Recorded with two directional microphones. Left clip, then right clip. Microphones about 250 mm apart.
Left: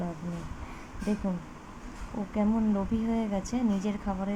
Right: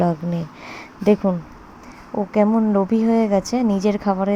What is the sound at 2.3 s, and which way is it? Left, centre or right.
A woman's voice, right.